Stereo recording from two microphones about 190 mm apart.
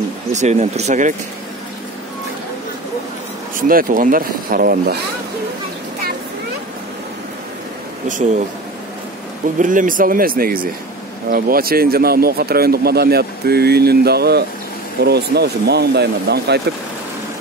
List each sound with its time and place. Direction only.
0.3 s speech: 35° right (ahead or behind)
3.5 s speech: 45° right (ahead or behind)
8.1 s speech: 40° right (ahead or behind)
9.6 s speech: 45° right (ahead or behind); by 16.6 s 60° right (ahead or behind)